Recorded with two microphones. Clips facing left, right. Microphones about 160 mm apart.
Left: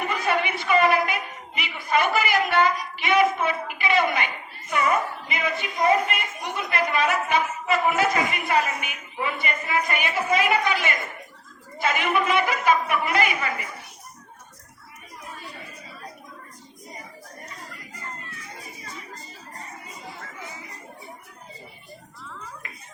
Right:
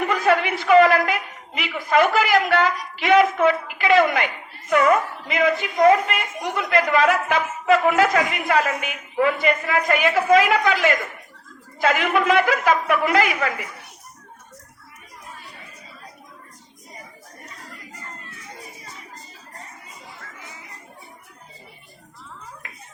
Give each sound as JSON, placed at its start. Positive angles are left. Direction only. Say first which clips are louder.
{"t": 0.1, "sound": "a man's voice", "louder": "right 6 dB", "side_deg": -90}